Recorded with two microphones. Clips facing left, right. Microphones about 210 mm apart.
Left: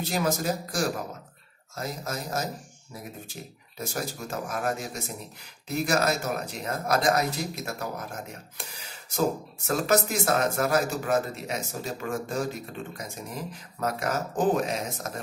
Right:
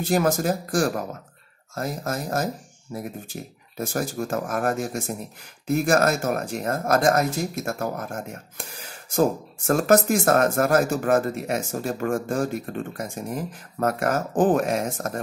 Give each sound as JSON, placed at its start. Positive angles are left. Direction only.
{"t": 0.0, "sound": "speech", "side_deg": -50}